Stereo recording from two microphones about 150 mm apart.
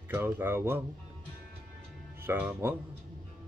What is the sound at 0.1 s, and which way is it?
Music, 15° right (ahead or behind).